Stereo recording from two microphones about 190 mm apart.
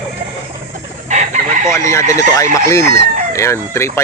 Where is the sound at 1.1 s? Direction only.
40° right (ahead or behind).